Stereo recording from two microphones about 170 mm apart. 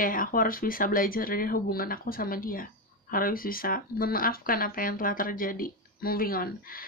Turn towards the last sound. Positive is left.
turn(degrees=60)  # may be behind; listen again after turning